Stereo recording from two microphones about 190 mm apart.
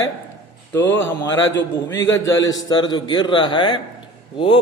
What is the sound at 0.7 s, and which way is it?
A man's voice, 10° left (ahead or behind).